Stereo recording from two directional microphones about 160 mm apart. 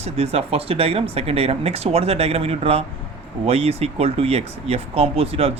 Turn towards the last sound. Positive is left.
turn(degrees=-40)  # may be behind; listen again after turning